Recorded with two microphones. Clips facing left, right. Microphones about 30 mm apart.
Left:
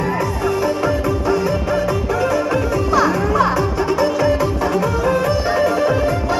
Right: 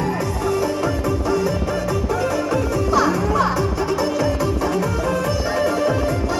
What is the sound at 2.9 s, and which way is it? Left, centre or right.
Music, centre.